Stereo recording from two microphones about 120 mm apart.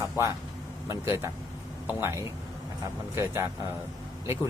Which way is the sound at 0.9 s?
25° right (ahead or behind).